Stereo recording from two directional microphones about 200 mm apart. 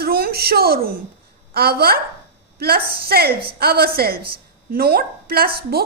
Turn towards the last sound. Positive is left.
turn(degrees=-50)  # may be behind; listen again after turning